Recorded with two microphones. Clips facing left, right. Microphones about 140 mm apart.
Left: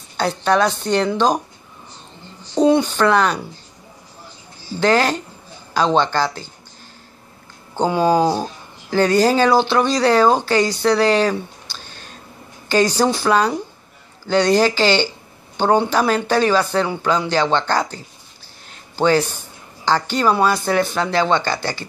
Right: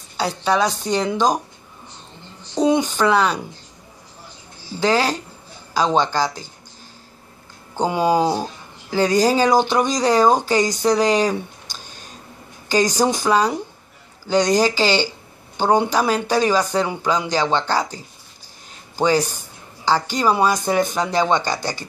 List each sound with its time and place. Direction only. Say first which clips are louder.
0.2 s speech: left 2 dB; 10° right (ahead or behind)
2.6 s speech: left 3 dB; 10° right (ahead or behind)
4.7 s speech: left 2 dB; 10° right (ahead or behind)
7.7 s speech: left 2 dB; 10° right (ahead or behind)